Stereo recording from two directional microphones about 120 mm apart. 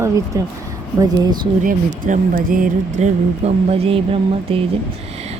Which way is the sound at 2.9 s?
70° right (ahead or behind).